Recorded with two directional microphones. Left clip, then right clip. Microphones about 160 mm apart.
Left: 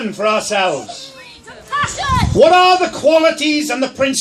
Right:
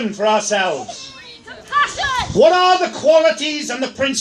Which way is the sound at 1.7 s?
5° left (ahead or behind).